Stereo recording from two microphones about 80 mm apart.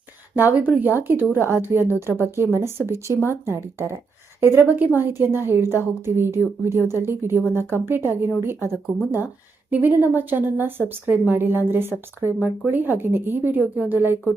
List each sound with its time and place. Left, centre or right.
0.3 s speech: right